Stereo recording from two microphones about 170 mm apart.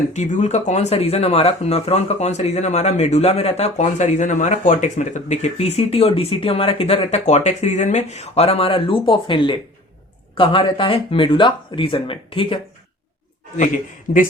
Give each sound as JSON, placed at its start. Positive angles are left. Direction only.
{"t": 0.1, "sound": "speech", "side_deg": 45}